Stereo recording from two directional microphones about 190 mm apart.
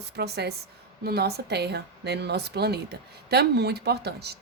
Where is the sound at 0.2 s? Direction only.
60° right (ahead or behind).